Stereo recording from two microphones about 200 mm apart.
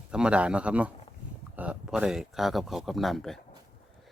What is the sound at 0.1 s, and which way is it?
Speech, 5° right (ahead or behind).